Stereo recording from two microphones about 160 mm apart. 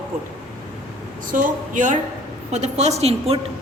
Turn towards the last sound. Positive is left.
turn(degrees=-40)  # may be behind; listen again after turning